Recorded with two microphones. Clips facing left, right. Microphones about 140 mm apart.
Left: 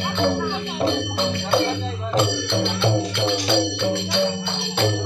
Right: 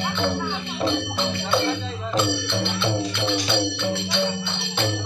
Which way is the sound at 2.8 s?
35° left (ahead or behind).